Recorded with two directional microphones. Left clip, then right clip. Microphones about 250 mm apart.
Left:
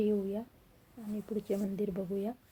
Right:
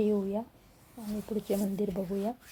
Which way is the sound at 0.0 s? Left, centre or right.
Centre.